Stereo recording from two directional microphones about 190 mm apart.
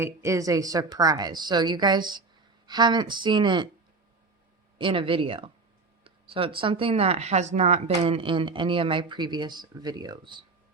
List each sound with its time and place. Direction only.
0.0 s speech: 15° right (ahead or behind)
4.8 s speech: 25° right (ahead or behind)